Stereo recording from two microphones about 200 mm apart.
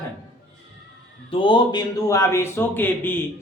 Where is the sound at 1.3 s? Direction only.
25° left (ahead or behind).